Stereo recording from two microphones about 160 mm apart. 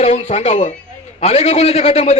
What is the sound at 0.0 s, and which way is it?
A man's voice, 40° left (ahead or behind).